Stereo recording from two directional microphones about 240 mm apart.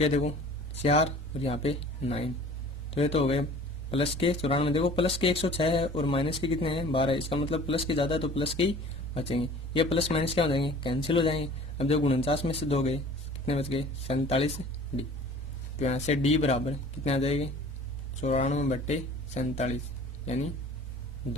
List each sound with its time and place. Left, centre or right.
0.0 s speech: left
15.8 s speech: left